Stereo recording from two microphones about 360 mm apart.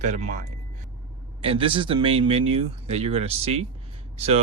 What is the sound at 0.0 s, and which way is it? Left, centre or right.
Speech, centre.